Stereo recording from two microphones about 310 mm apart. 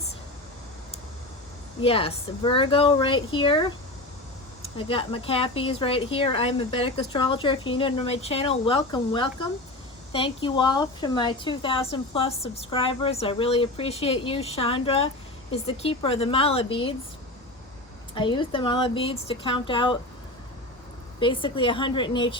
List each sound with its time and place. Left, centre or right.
1.8 s a woman's voice: centre
4.8 s a woman's voice: centre
18.1 s a woman's voice: centre
21.2 s a woman's voice: centre